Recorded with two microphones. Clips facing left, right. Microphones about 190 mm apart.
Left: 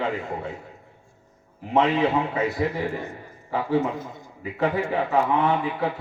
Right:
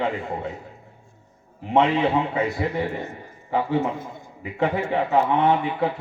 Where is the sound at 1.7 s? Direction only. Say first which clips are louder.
Right 1 dB; 30° right (ahead or behind).